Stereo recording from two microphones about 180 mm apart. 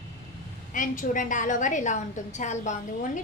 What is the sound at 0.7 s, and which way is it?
A woman's voice, 45° left (ahead or behind).